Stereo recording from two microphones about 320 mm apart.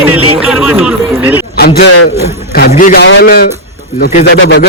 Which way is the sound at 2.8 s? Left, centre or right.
Left.